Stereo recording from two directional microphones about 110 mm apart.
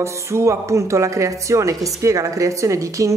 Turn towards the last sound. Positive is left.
turn(degrees=-30)  # may be behind; listen again after turning